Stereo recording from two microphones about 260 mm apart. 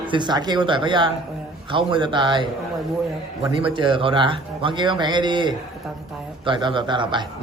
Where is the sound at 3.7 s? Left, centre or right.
Centre.